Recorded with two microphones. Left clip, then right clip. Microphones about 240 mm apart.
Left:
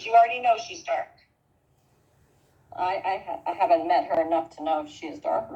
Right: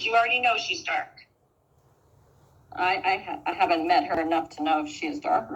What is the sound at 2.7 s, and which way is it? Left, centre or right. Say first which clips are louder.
Speech: right 2 dB; right.